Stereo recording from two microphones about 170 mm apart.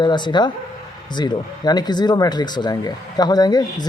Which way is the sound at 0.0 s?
25° left (ahead or behind).